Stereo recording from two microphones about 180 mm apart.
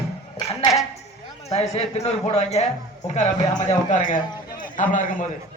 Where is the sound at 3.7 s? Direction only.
40° left (ahead or behind).